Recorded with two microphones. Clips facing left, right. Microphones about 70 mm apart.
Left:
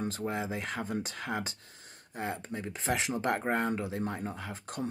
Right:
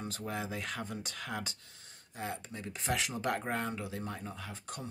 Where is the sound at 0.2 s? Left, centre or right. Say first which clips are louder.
Left 4 dB; left.